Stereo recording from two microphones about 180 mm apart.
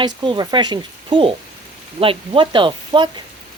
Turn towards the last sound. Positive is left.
turn(degrees=-25)  # may be behind; listen again after turning